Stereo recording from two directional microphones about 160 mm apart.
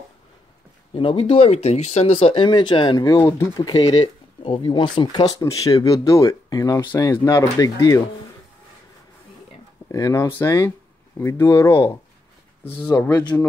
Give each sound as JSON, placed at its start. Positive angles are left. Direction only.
{"t": 0.9, "sound": "speech", "side_deg": 35}
{"t": 3.1, "sound": "speech", "side_deg": 20}
{"t": 9.8, "sound": "speech", "side_deg": 20}
{"t": 13.1, "sound": "speech", "side_deg": 25}